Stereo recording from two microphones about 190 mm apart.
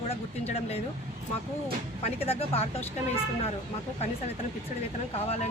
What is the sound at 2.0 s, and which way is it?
Speech, 30° left (ahead or behind).